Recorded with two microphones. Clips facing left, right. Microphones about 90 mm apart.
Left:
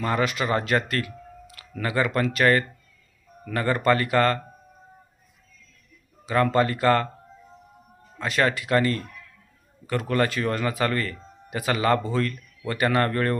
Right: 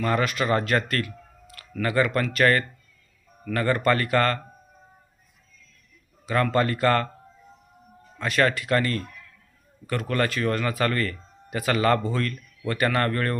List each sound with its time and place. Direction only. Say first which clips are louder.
0.0 s speech: even; 20° left (ahead or behind)
6.2 s speech: left 1 dB; 20° left (ahead or behind)
8.2 s speech: right 1 dB; 20° left (ahead or behind)